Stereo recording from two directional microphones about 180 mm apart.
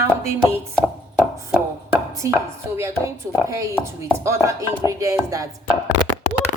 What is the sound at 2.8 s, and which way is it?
Chopping, 15° right (ahead or behind).